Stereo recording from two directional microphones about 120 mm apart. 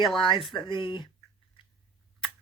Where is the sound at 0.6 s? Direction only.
45° left (ahead or behind).